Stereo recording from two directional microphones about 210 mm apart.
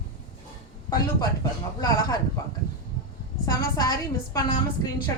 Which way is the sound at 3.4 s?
20° left (ahead or behind).